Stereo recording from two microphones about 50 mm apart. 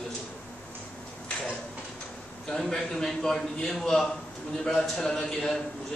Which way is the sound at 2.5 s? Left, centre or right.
Centre.